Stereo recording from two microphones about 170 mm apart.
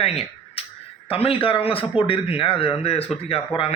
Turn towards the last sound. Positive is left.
turn(degrees=35)  # may be behind; listen again after turning